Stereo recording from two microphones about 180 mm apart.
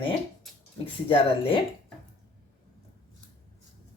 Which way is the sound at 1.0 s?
30° left (ahead or behind).